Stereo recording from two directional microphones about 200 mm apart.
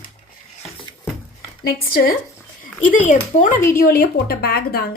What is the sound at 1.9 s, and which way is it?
A woman's voice, 45° left (ahead or behind).